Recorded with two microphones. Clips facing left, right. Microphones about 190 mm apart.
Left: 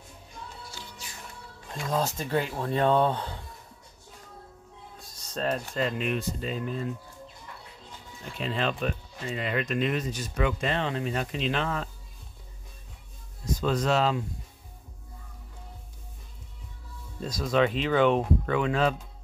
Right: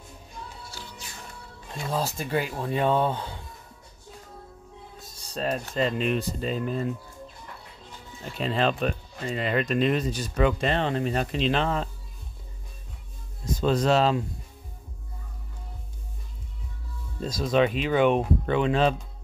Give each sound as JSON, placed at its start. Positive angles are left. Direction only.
{"t": 1.9, "sound": "speech", "side_deg": -10}
{"t": 5.3, "sound": "speech", "side_deg": -15}
{"t": 8.4, "sound": "speech", "side_deg": -35}
{"t": 13.6, "sound": "speech", "side_deg": -30}
{"t": 17.2, "sound": "speech", "side_deg": -25}
{"t": 18.4, "sound": "speech", "side_deg": -25}